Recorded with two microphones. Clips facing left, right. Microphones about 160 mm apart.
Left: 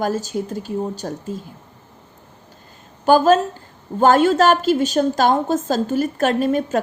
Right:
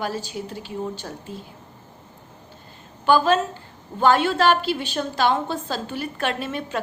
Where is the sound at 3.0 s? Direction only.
45° left (ahead or behind).